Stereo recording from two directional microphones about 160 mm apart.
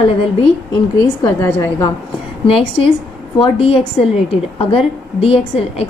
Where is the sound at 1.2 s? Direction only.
20° left (ahead or behind).